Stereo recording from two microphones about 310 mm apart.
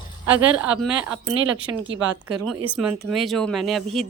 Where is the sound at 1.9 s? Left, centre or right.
Right.